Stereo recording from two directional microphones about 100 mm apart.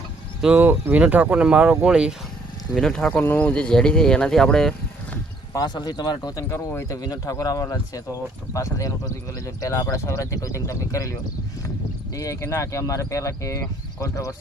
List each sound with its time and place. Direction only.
0.4 s speech: 20° right (ahead or behind)
2.7 s speech: 5° left (ahead or behind)
5.5 s speech: 45° left (ahead or behind)
6.5 s speech: 25° left (ahead or behind)